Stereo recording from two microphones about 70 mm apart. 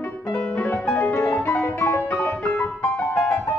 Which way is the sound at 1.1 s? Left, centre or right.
Left.